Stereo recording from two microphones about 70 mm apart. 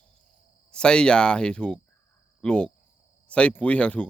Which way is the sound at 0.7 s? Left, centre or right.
Centre.